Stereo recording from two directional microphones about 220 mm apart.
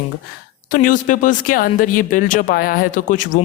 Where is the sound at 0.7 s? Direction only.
40° left (ahead or behind).